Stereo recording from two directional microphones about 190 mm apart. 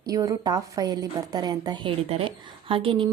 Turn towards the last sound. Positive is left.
turn(degrees=-30)  # may be behind; listen again after turning